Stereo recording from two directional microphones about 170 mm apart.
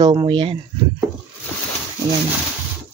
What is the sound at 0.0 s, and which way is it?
Speech, 25° right (ahead or behind).